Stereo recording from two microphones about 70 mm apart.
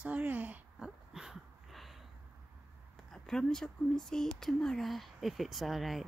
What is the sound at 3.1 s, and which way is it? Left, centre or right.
Speech, centre.